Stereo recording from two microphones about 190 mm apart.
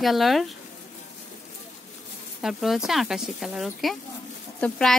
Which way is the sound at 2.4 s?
Centre (ahead or behind).